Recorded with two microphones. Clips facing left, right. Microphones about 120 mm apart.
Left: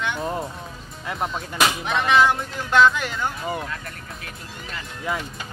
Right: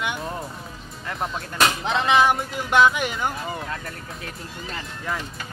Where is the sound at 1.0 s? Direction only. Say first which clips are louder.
Left 2 dB; 5° left (ahead or behind).